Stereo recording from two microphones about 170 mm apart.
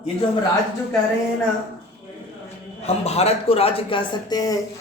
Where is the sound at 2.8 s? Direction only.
35° left (ahead or behind).